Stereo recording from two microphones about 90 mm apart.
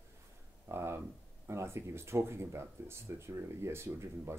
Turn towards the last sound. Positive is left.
turn(degrees=-30)  # may be behind; listen again after turning